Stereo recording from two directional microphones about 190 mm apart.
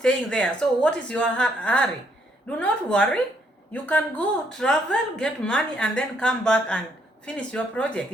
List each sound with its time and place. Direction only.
0.0 s a woman's voice: 5° left (ahead or behind)